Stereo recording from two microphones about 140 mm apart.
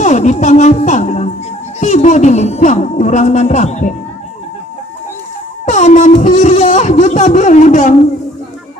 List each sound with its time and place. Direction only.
0.0 s music: 60° left (ahead or behind)
1.8 s speech: 55° left (ahead or behind)
5.6 s speech: 60° left (ahead or behind)